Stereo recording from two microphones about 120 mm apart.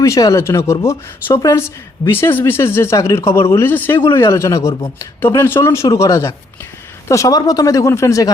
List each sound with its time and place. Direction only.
0.0 s speech: 25° left (ahead or behind)